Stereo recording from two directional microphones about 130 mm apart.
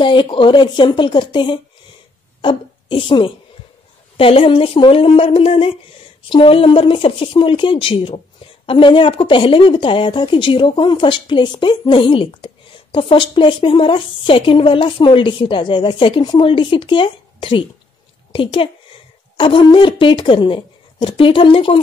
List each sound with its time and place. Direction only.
0.0 s a woman's voice: 40° left (ahead or behind)